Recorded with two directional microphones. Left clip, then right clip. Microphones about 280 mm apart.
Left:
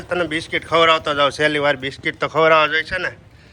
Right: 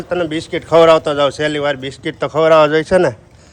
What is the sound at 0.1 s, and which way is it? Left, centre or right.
A man's voice, centre.